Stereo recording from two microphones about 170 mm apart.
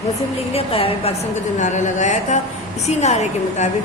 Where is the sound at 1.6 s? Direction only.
45° left (ahead or behind).